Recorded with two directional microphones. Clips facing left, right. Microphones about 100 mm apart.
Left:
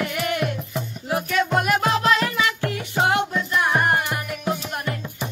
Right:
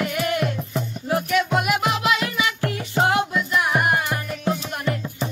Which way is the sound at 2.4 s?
25° right (ahead or behind).